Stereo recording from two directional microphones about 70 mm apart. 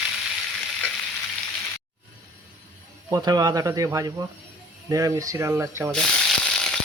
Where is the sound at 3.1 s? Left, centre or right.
Right.